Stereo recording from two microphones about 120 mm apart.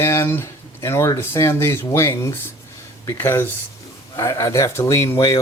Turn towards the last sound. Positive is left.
turn(degrees=25)  # may be behind; listen again after turning